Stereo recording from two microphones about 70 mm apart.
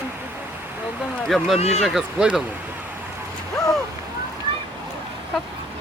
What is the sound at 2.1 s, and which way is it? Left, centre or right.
Speech, centre.